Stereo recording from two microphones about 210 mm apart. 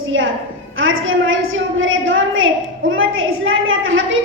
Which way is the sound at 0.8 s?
70° right (ahead or behind).